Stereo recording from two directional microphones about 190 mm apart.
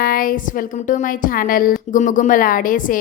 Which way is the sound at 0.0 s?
50° left (ahead or behind).